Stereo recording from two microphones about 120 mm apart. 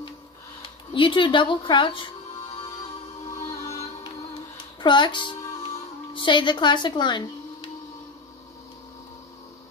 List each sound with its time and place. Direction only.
0.9 s a woman's voice: 45° left (ahead or behind)
4.7 s music: 40° left (ahead or behind)
6.1 s speech: 40° left (ahead or behind)